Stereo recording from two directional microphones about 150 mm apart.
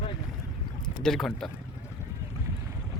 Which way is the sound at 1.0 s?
5° left (ahead or behind).